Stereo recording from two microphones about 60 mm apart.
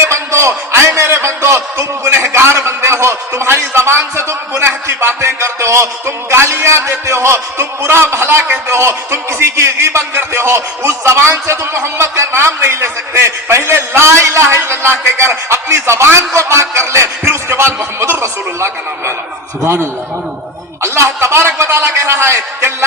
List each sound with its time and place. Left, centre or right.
0.0 s a man's voice: right